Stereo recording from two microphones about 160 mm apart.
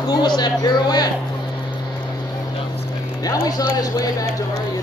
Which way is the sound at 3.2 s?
25° left (ahead or behind).